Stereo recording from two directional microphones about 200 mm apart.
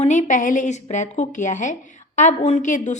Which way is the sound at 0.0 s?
40° left (ahead or behind).